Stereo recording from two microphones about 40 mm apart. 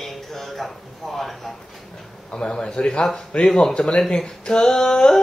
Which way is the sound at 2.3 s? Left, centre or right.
Left.